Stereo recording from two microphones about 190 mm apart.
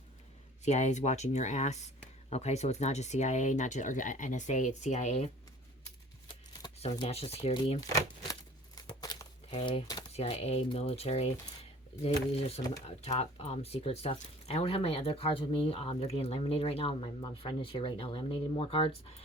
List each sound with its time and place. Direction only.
0.6 s speech: 35° left (ahead or behind)
6.9 s speech: 30° left (ahead or behind)
8.3 s tearing: 20° left (ahead or behind)
9.6 s speech: 30° left (ahead or behind)